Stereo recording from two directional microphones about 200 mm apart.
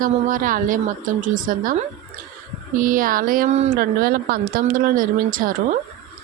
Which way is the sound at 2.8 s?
45° right (ahead or behind).